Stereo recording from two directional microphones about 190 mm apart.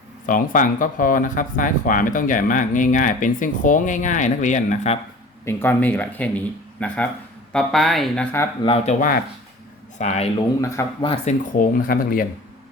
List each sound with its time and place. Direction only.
0.3 s speech: 45° left (ahead or behind)
5.5 s speech: 10° left (ahead or behind)
8.6 s speech: 35° left (ahead or behind)
10.6 s speech: 15° left (ahead or behind)
11.5 s speech: 45° left (ahead or behind)